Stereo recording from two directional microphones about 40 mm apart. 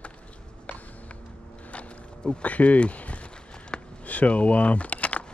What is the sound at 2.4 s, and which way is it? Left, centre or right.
Speech, left.